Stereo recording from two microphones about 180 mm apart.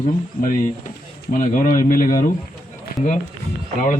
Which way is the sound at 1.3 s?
50° left (ahead or behind).